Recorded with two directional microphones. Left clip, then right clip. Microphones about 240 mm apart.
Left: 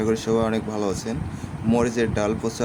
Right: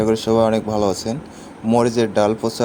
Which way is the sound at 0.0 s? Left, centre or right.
Centre.